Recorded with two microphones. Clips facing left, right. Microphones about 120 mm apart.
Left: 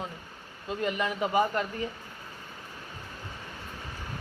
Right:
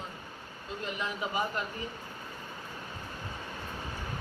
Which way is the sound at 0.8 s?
60° left (ahead or behind).